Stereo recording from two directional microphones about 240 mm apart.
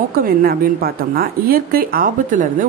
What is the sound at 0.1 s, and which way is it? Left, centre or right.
A woman's voice, right.